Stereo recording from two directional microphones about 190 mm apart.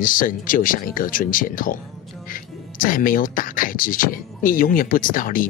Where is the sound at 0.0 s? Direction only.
45° left (ahead or behind).